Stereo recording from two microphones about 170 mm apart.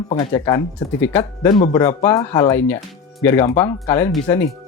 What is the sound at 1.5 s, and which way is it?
Speech, 25° left (ahead or behind).